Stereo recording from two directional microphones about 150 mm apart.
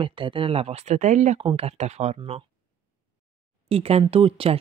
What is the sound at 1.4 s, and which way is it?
Speech, 40° right (ahead or behind).